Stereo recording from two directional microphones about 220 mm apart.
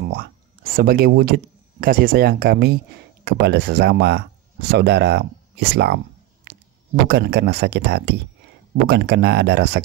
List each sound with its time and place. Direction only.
0.0 s speech: 40° right (ahead or behind)
7.1 s speech: 50° right (ahead or behind)